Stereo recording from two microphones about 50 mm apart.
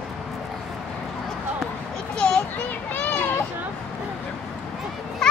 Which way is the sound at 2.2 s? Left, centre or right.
Left.